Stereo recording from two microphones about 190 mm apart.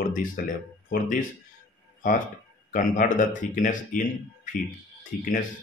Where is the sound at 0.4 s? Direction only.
50° left (ahead or behind).